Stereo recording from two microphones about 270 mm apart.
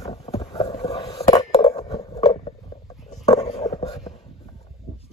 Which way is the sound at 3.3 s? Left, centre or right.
Left.